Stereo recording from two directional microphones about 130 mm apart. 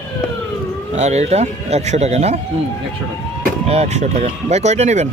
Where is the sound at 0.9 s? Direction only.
60° right (ahead or behind).